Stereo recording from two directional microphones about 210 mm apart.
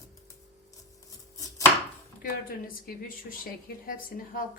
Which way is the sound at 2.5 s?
40° left (ahead or behind).